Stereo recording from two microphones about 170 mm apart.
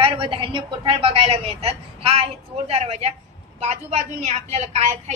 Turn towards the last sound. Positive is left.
turn(degrees=-45)  # may be behind; listen again after turning